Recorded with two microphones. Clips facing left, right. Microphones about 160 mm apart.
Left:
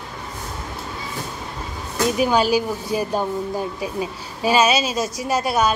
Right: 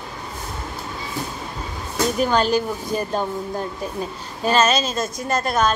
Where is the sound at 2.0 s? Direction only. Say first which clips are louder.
Left 1 dB; 5° left (ahead or behind).